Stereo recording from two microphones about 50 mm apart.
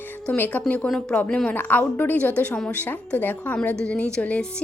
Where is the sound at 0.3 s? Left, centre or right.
Left.